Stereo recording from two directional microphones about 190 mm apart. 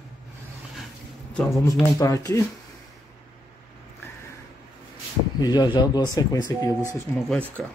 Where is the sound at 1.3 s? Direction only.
5° left (ahead or behind).